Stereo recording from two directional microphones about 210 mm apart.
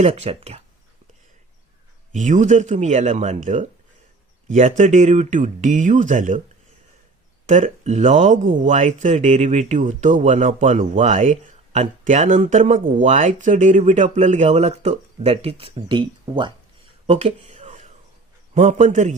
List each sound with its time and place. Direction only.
0.0 s speech: 30° right (ahead or behind)
2.1 s speech: 35° right (ahead or behind)
7.4 s speech: 30° right (ahead or behind)
17.1 s a sound: 30° right (ahead or behind)
18.5 s speech: 35° right (ahead or behind)